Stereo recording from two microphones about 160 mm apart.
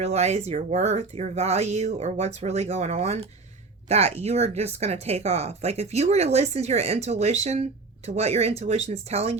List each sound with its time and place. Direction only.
0.0 s speech: 40° right (ahead or behind)